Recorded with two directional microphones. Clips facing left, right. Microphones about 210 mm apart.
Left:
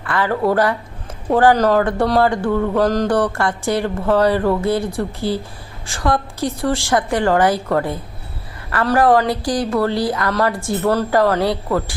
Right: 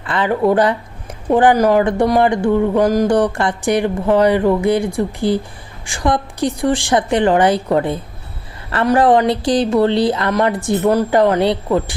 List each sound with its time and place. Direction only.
0.0 s speech: 20° right (ahead or behind)